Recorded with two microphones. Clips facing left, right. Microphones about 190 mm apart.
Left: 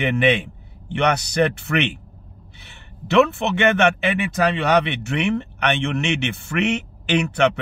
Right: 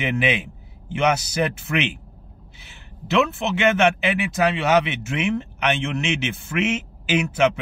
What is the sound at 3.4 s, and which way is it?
Speech, 60° left (ahead or behind).